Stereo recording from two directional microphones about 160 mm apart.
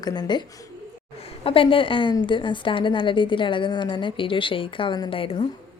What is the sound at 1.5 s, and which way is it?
A woman's voice, 35° left (ahead or behind).